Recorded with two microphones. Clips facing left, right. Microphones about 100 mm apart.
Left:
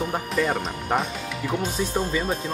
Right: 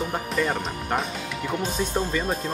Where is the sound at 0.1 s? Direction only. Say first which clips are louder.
Left 1 dB; centre (ahead or behind).